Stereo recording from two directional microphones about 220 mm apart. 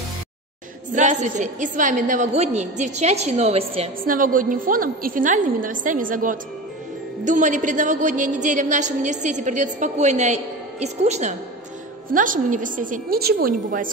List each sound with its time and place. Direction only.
0.9 s a woman's voice: 35° right (ahead or behind)
4.0 s a woman's voice: 40° right (ahead or behind)